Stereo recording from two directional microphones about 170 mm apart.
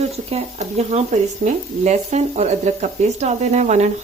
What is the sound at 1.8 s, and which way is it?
Speech, 40° right (ahead or behind).